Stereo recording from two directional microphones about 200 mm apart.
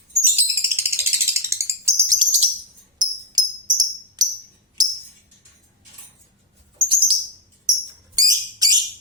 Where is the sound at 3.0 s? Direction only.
20° right (ahead or behind).